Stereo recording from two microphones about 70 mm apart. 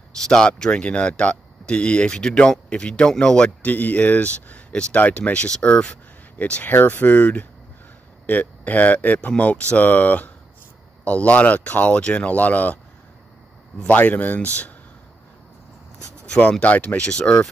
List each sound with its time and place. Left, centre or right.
0.1 s speech: centre
13.8 s speech: left
16.3 s speech: centre